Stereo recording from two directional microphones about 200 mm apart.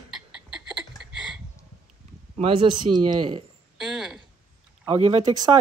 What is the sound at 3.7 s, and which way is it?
Speech, 5° right (ahead or behind).